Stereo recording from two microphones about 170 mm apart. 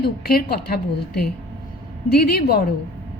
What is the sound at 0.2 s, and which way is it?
A woman's voice, 65° left (ahead or behind).